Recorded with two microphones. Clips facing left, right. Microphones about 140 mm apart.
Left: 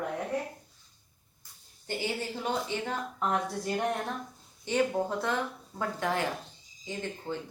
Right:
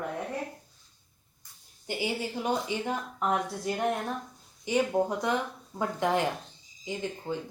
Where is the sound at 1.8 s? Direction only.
15° right (ahead or behind).